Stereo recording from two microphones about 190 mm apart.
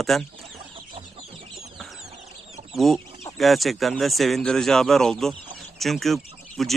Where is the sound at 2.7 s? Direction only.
Centre (ahead or behind).